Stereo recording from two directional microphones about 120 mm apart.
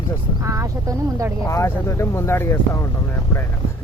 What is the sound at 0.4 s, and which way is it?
Speech, 25° right (ahead or behind).